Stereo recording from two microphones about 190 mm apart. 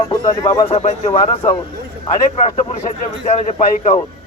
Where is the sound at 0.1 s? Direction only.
20° left (ahead or behind).